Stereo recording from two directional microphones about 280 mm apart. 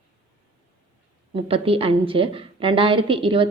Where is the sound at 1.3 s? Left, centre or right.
Centre.